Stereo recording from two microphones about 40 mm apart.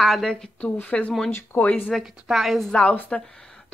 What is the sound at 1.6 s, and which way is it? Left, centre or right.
Speech, left.